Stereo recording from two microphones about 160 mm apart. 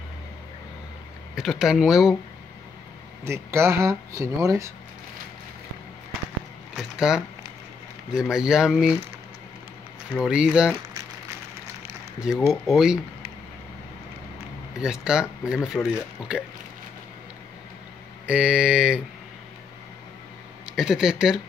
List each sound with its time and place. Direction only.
1.3 s speech: centre (ahead or behind)
3.3 s speech: 15° right (ahead or behind)
6.7 s a sound: 5° right (ahead or behind)
8.1 s speech: 5° right (ahead or behind)
10.1 s speech: 5° right (ahead or behind)
12.2 s speech: centre (ahead or behind)
14.8 s speech: 5° right (ahead or behind)
18.2 s speech: 5° right (ahead or behind)
20.7 s speech: 5° right (ahead or behind)